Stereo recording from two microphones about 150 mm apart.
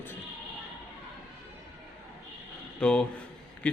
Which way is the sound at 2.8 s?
5° left (ahead or behind).